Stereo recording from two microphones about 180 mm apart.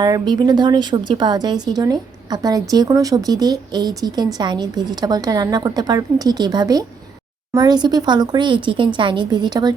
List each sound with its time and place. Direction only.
0.0 s speech: 20° right (ahead or behind)